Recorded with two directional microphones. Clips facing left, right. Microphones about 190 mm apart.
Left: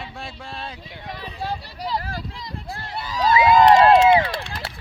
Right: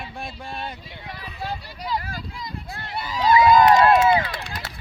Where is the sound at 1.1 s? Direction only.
35° left (ahead or behind).